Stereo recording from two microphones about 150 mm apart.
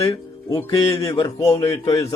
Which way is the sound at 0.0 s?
20° left (ahead or behind).